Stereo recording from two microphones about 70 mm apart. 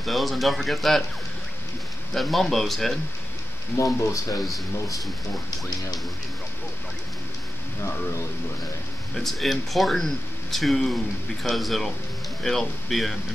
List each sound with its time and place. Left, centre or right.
0.0 s speech: centre
2.1 s speech: centre
3.7 s speech: left
9.1 s speech: centre